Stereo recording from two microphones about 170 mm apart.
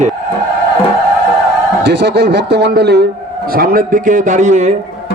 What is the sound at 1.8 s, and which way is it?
Speech, 90° right.